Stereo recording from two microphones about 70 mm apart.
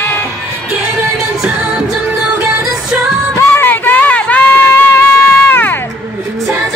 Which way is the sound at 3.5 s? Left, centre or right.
Left.